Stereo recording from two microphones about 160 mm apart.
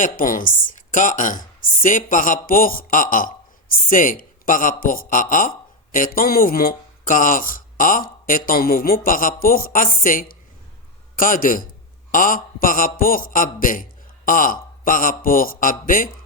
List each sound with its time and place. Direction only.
0.0 s a woman's voice: 60° left (ahead or behind)